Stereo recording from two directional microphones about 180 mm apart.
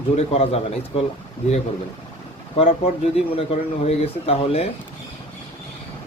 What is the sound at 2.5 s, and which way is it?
Speech, 35° left (ahead or behind).